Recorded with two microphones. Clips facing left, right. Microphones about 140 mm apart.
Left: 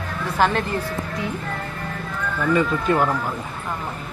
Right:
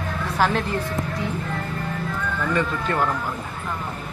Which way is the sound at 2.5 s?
15° left (ahead or behind).